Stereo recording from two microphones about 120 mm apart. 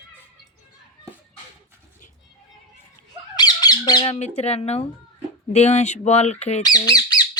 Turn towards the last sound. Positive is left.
turn(degrees=35)  # may be behind; listen again after turning